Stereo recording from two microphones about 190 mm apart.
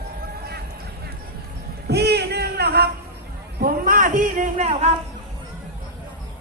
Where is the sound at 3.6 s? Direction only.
45° right (ahead or behind).